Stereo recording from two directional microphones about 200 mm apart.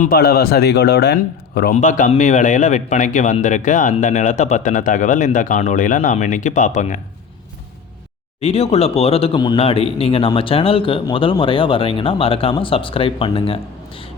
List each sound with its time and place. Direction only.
0.0 s a man's voice: 50° left (ahead or behind)
1.7 s a man's voice: 40° left (ahead or behind)
8.4 s speech: 30° left (ahead or behind)